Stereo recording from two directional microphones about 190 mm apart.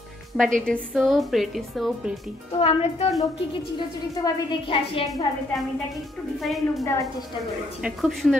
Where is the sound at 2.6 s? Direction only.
30° left (ahead or behind).